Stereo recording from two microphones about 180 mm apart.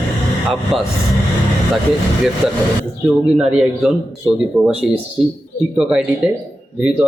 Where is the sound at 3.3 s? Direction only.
5° right (ahead or behind).